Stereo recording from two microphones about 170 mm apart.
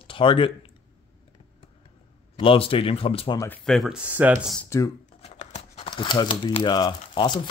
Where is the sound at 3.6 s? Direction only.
Centre (ahead or behind).